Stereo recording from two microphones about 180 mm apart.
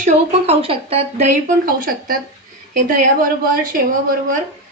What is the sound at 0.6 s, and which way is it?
Speech, 30° right (ahead or behind).